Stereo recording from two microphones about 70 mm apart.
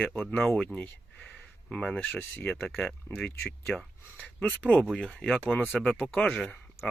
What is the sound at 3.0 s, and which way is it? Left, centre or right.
Speech, left.